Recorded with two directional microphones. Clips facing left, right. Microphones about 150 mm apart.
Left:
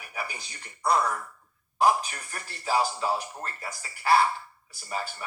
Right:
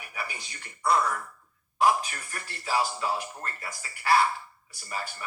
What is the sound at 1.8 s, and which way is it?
A man's voice, 35° left (ahead or behind).